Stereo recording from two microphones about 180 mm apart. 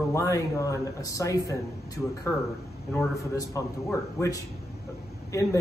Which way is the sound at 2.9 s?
20° left (ahead or behind).